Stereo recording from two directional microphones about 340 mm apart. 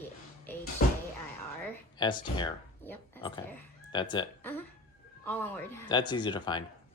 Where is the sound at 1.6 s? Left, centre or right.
Centre.